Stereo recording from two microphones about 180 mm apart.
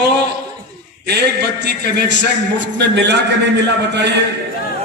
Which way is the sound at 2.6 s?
75° right (ahead or behind).